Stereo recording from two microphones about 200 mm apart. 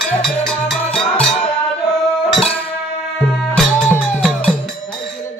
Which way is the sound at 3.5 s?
5° left (ahead or behind).